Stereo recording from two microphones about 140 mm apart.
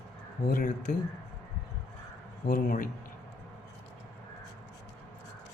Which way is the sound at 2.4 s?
75° left (ahead or behind).